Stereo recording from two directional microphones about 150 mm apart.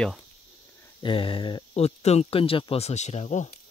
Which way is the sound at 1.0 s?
35° left (ahead or behind).